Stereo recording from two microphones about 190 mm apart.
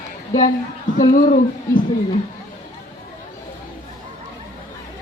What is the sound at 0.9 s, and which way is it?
Speech, 40° left (ahead or behind).